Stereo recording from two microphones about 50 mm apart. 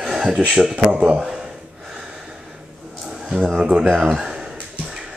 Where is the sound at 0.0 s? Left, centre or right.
Centre.